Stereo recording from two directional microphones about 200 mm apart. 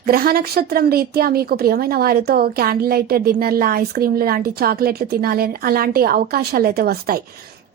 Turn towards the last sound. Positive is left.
turn(degrees=-50)  # may be behind; listen again after turning